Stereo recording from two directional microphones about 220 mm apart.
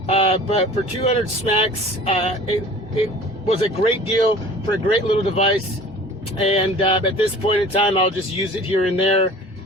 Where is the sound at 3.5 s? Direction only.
30° left (ahead or behind).